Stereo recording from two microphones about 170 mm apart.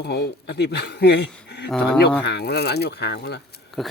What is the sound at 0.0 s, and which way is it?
Speech, 70° left (ahead or behind).